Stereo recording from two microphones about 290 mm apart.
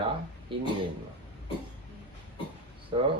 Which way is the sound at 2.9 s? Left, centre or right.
Centre.